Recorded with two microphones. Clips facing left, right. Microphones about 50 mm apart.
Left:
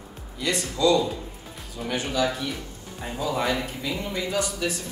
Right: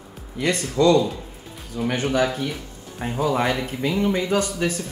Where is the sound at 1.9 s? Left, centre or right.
Right.